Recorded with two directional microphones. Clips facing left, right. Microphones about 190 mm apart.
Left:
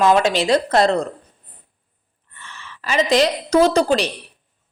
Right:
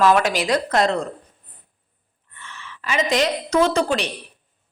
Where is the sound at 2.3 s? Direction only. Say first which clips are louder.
Even; 35° left (ahead or behind).